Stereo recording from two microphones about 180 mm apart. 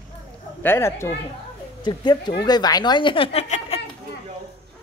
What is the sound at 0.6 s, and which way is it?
Speech, 15° left (ahead or behind).